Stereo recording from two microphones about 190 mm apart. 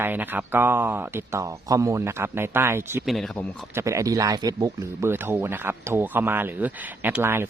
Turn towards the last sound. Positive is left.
turn(degrees=-10)  # may be behind; listen again after turning